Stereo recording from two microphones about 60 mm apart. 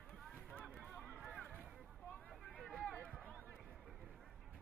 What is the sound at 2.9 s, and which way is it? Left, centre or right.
Run, centre.